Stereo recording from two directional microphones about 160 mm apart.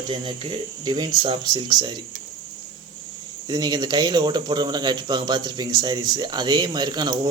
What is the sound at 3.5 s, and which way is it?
Speech, 25° right (ahead or behind).